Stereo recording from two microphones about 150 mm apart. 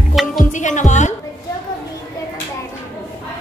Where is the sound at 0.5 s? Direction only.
55° left (ahead or behind).